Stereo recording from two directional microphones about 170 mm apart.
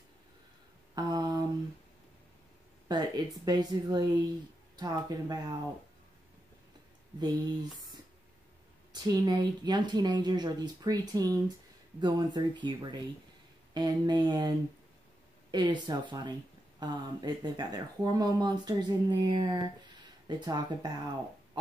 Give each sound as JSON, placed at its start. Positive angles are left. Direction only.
{"t": 0.9, "sound": "a sound", "side_deg": -25}
{"t": 2.9, "sound": "speech", "side_deg": -25}
{"t": 7.2, "sound": "speech", "side_deg": -25}
{"t": 15.5, "sound": "speech", "side_deg": -25}